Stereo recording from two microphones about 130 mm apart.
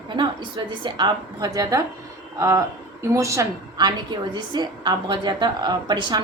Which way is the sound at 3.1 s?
25° right (ahead or behind).